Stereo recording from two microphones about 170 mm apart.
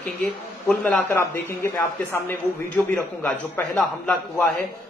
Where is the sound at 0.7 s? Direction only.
10° left (ahead or behind).